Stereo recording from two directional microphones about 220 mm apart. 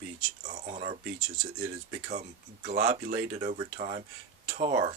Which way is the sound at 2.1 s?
35° right (ahead or behind).